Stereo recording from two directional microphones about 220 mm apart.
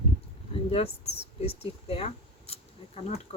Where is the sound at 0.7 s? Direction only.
25° left (ahead or behind).